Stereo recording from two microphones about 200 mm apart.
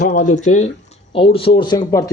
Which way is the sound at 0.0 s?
40° left (ahead or behind).